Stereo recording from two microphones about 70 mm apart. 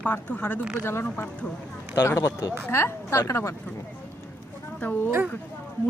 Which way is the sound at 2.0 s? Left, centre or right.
Left.